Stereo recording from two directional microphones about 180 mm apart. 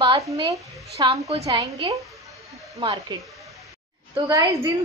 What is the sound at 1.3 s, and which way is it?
A woman's voice, 35° right (ahead or behind).